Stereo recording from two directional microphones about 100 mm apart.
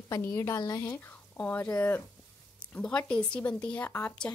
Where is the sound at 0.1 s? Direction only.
30° left (ahead or behind).